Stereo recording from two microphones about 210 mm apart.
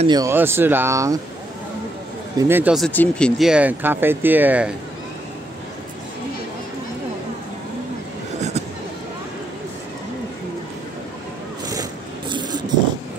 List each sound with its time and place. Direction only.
0.0 s speech: 20° right (ahead or behind)
2.3 s speech: 10° right (ahead or behind)
2.9 s speech: 5° left (ahead or behind)
12.3 s a sound: 20° right (ahead or behind)